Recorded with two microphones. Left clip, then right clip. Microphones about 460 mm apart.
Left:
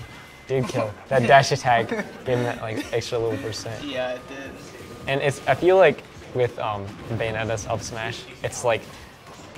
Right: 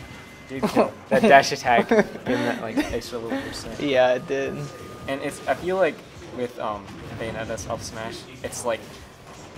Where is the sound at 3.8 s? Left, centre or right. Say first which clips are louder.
Right 11 dB; right.